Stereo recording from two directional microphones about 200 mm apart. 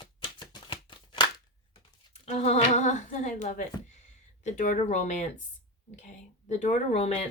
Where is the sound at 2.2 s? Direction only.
35° left (ahead or behind).